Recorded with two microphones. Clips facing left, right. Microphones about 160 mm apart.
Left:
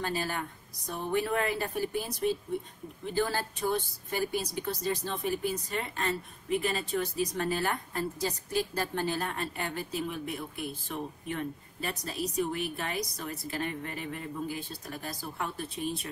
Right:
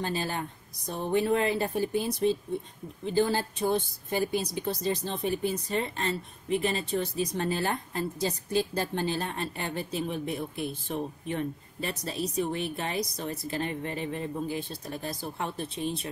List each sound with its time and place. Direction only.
0.0 s speech: 25° right (ahead or behind)